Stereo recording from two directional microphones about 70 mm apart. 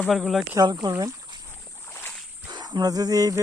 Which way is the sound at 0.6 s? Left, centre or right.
Right.